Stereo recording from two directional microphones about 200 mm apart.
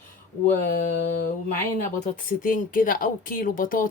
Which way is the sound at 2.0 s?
40° left (ahead or behind).